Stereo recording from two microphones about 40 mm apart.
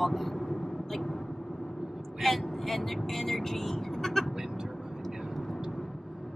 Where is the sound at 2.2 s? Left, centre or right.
Centre.